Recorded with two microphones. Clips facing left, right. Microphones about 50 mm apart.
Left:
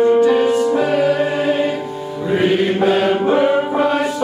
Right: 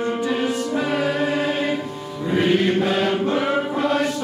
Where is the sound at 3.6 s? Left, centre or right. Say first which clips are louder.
Left 4 dB; centre.